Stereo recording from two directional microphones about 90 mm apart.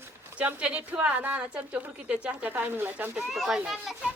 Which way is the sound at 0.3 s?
15° right (ahead or behind).